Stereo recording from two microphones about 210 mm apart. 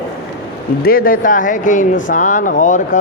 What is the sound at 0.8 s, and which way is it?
A man's voice, 45° left (ahead or behind).